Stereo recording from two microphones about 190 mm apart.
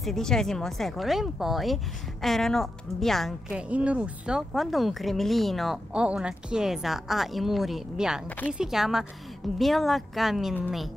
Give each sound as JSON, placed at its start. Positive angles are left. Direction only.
{"t": 0.0, "sound": "speech", "side_deg": 0}
{"t": 8.3, "sound": "speech", "side_deg": 10}
{"t": 8.5, "sound": "speech", "side_deg": 0}